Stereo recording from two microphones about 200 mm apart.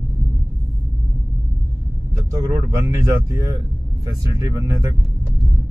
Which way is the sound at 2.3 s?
10° right (ahead or behind).